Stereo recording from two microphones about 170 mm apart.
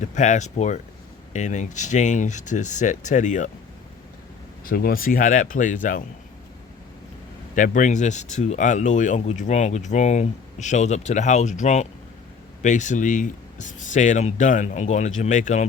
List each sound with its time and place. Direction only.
0.0 s speech: 45° left (ahead or behind)
4.6 s speech: 60° left (ahead or behind)
7.5 s speech: 50° left (ahead or behind)